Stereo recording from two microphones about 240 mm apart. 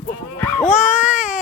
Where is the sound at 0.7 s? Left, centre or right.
Centre.